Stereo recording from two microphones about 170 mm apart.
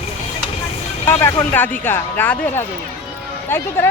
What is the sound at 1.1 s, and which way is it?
Speech, 15° left (ahead or behind).